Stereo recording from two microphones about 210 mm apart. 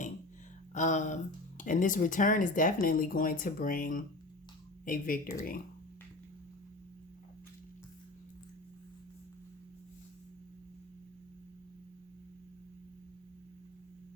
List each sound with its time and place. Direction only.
0.7 s speech: 35° left (ahead or behind)